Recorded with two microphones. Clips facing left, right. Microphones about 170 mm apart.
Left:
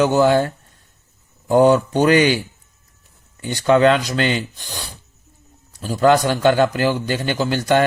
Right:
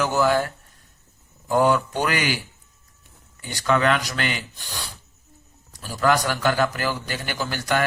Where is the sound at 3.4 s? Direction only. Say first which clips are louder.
Left 7 dB; 25° left (ahead or behind).